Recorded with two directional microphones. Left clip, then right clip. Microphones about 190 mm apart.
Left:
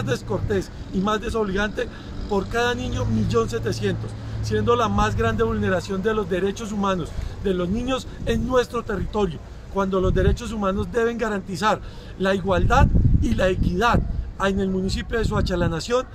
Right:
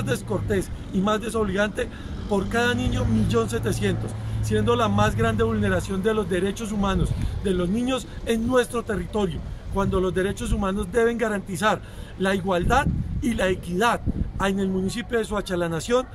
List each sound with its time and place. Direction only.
0.0 s speech: 10° right (ahead or behind)